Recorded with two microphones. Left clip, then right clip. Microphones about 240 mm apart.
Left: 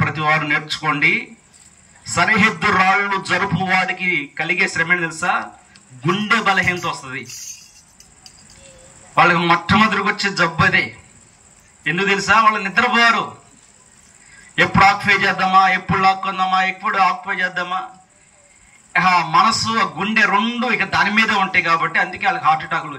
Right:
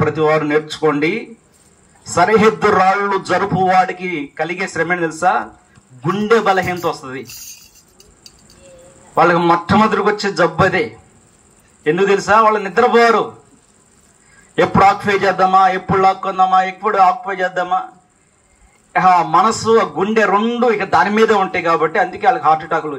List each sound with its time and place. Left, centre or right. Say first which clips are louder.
0.0 s a man's voice: right 3 dB; right
9.1 s a man's voice: right 2 dB; right
14.5 s a man's voice: right 2 dB; right
18.9 s a man's voice: right 3 dB; right